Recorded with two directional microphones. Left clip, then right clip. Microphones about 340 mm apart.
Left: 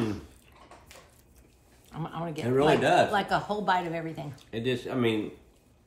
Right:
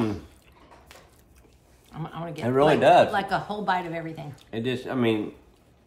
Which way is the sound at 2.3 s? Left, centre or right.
Centre.